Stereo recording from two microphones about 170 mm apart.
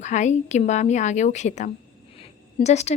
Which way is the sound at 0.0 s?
45° left (ahead or behind).